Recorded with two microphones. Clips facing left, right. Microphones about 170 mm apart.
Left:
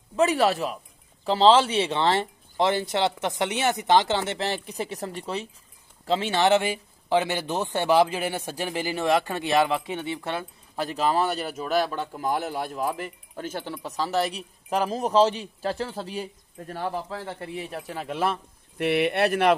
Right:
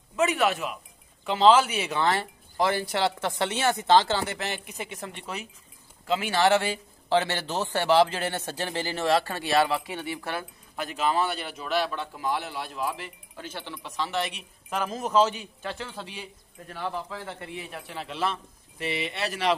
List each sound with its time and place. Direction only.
0.1 s a man's voice: 35° left (ahead or behind)
10.9 s a man's voice: 35° left (ahead or behind); by 19.5 s 55° left (ahead or behind)